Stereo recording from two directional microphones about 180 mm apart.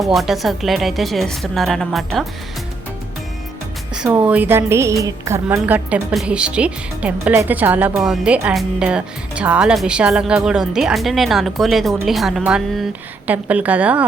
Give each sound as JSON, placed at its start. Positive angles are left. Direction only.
{"t": 0.0, "sound": "a woman's voice", "side_deg": 0}
{"t": 3.9, "sound": "a woman's voice", "side_deg": -5}